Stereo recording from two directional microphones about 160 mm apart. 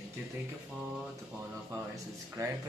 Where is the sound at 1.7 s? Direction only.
20° right (ahead or behind).